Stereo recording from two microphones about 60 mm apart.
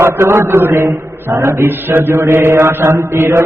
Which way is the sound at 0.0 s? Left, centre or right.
Right.